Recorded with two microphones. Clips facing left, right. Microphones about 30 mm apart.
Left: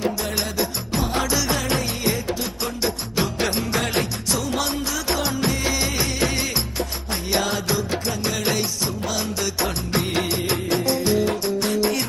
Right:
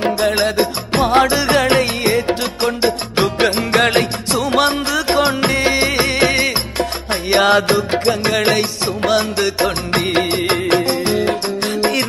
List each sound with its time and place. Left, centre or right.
0.0 s music: right
8.0 s music: right